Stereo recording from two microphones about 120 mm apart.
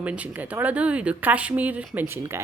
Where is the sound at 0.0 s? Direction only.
10° right (ahead or behind).